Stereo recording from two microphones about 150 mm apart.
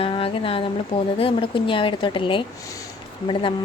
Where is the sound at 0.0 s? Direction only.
35° left (ahead or behind).